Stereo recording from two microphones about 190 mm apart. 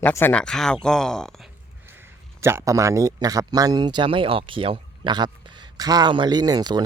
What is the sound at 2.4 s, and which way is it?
Speech, 15° right (ahead or behind).